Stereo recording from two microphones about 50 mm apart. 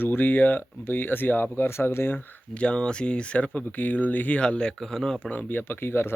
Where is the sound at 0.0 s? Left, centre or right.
Left.